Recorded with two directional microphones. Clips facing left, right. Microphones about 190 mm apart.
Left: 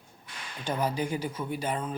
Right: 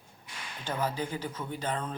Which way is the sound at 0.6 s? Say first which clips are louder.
Left 3 dB; 15° left (ahead or behind).